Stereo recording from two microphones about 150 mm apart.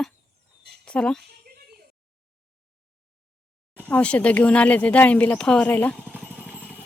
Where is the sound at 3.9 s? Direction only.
10° left (ahead or behind).